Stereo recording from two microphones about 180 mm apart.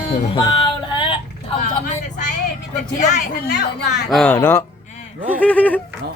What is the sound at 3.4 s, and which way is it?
Speech, 65° left (ahead or behind).